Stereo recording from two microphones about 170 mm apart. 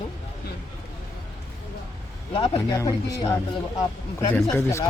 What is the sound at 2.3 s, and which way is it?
Speech, 35° left (ahead or behind).